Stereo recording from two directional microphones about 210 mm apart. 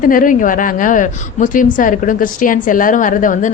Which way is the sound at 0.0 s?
40° left (ahead or behind).